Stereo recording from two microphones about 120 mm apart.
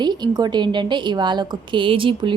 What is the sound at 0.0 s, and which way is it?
A woman's voice, 40° right (ahead or behind).